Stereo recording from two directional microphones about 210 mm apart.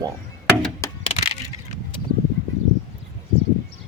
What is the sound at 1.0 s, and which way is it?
Crushing, 30° left (ahead or behind).